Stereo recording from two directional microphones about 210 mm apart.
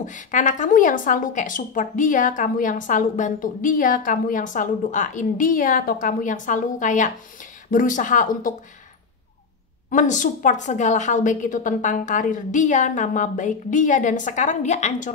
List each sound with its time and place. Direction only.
0.0 s a woman's voice: 35° left (ahead or behind)
9.8 s a woman's voice: 35° left (ahead or behind)